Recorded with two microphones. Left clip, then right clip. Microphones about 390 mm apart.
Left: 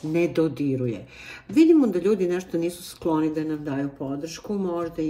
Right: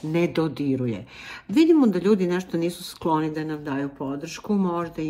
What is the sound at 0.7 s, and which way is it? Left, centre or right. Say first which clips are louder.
Speech: even; right.